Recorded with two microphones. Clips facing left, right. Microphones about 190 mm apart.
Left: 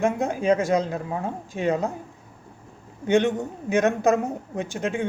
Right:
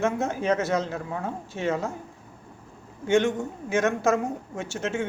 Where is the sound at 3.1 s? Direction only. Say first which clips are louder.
Left 2 dB; 20° left (ahead or behind).